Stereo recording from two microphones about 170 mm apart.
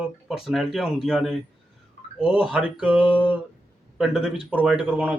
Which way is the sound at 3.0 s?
30° left (ahead or behind).